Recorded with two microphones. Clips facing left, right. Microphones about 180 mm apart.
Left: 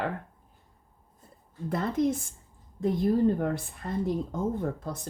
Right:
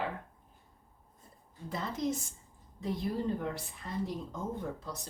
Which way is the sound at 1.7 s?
55° left (ahead or behind).